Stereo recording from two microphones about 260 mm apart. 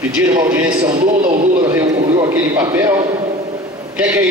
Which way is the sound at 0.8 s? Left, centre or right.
Centre.